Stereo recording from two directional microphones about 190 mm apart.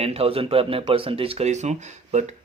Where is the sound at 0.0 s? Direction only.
30° right (ahead or behind).